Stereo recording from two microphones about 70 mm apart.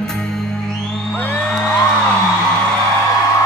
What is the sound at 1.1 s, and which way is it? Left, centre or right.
Music, left.